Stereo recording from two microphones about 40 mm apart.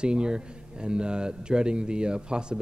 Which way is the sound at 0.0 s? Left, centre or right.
Right.